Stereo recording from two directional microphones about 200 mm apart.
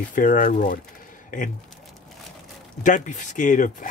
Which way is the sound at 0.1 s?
40° left (ahead or behind).